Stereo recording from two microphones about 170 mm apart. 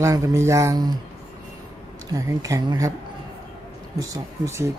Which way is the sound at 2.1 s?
20° right (ahead or behind).